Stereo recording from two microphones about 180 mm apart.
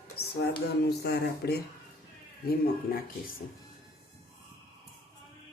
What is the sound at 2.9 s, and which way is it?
Speech, 55° left (ahead or behind).